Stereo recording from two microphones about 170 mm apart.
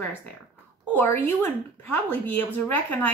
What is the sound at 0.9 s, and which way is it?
A woman's voice, 10° left (ahead or behind).